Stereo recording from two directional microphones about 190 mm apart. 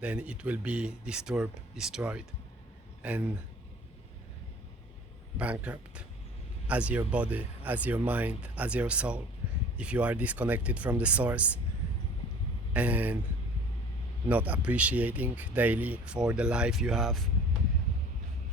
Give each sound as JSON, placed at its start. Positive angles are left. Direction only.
{"t": 0.0, "sound": "speech", "side_deg": -5}
{"t": 5.4, "sound": "speech", "side_deg": -5}
{"t": 12.7, "sound": "speech", "side_deg": -5}
{"t": 14.3, "sound": "speech", "side_deg": -10}